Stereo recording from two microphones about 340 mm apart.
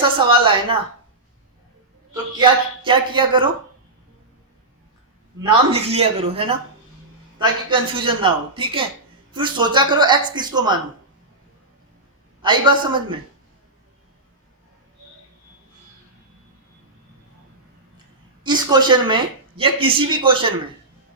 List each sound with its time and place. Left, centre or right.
0.2 s speech: centre
2.4 s speech: centre
5.4 s speech: centre
12.4 s speech: centre
18.4 s speech: centre